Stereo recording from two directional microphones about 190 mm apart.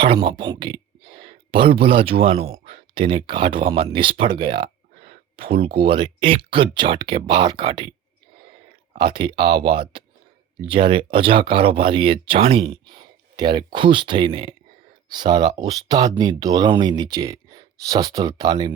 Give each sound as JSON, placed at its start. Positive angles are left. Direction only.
{"t": 0.0, "sound": "speech", "side_deg": -25}
{"t": 9.0, "sound": "speech", "side_deg": -25}